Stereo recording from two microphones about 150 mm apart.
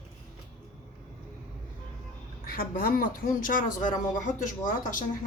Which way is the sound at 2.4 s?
70° left (ahead or behind).